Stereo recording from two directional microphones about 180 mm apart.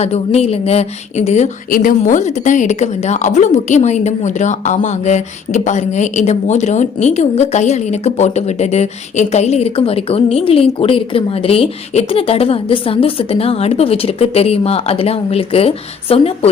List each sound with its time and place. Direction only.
0.0 s a woman's voice: 35° left (ahead or behind)